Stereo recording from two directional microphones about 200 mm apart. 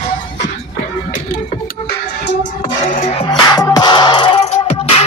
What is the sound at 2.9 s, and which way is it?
Music, 35° left (ahead or behind).